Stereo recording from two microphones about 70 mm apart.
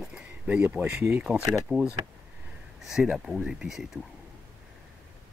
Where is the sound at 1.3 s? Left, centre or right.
Right.